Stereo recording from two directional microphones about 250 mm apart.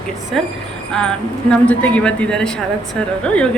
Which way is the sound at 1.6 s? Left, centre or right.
Centre.